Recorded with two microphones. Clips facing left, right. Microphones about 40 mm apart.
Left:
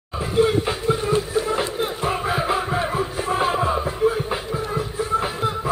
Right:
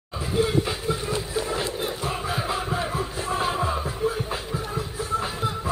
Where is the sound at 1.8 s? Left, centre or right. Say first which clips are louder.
Left 5 dB; left.